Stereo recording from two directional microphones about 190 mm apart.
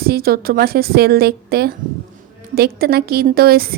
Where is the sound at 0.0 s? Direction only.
55° right (ahead or behind).